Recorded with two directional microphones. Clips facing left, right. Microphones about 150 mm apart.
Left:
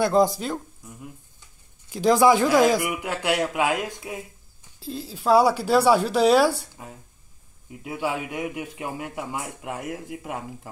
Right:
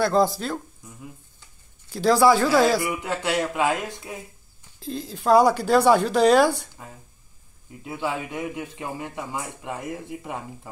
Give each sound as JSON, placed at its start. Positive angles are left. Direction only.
{"t": 0.0, "sound": "a man's voice", "side_deg": 15}
{"t": 1.9, "sound": "a man's voice", "side_deg": 15}